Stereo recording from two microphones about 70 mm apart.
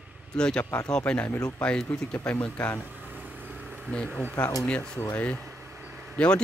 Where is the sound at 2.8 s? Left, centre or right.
Right.